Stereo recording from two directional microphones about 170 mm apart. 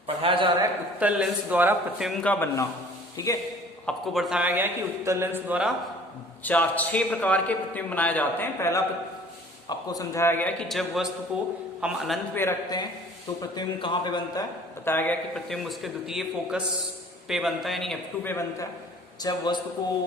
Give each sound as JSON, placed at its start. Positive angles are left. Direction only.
{"t": 0.2, "sound": "a sound", "side_deg": -30}
{"t": 0.9, "sound": "a man's voice", "side_deg": -10}
{"t": 3.8, "sound": "a man's voice", "side_deg": 0}
{"t": 6.4, "sound": "a man's voice", "side_deg": 10}
{"t": 12.3, "sound": "a man's voice", "side_deg": 15}
{"t": 13.4, "sound": "a man's voice", "side_deg": 25}
{"t": 14.8, "sound": "a man's voice", "side_deg": 10}
{"t": 18.2, "sound": "a man's voice", "side_deg": 15}